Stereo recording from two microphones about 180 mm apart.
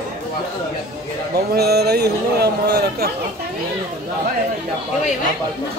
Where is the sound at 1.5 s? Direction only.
65° right (ahead or behind).